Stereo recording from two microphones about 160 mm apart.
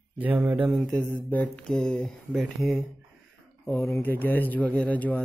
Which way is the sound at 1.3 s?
10° left (ahead or behind).